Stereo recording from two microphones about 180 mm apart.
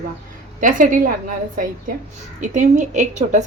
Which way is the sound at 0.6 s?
50° right (ahead or behind).